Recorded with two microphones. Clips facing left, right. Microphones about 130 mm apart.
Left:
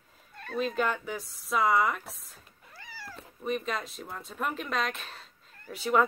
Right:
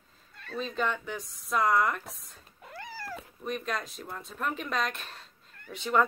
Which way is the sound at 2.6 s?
60° right (ahead or behind).